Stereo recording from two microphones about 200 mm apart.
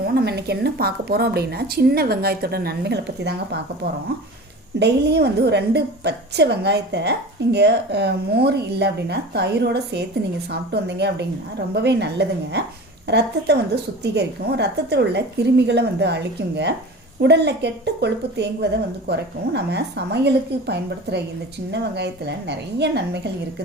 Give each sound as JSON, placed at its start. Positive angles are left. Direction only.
{"t": 0.0, "sound": "a woman's voice", "side_deg": -50}
{"t": 4.8, "sound": "a woman's voice", "side_deg": -55}